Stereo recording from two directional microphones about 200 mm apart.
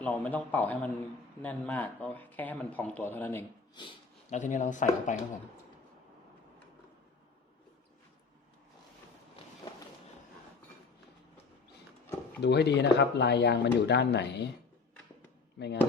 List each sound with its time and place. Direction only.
0.0 s speech: 10° left (ahead or behind)
3.8 s speech: 25° left (ahead or behind)
4.3 s speech: 40° left (ahead or behind)
12.4 s speech: 55° left (ahead or behind)
15.5 s speech: 60° left (ahead or behind)